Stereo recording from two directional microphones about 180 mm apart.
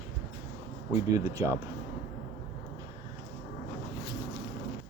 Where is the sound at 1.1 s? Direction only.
20° right (ahead or behind).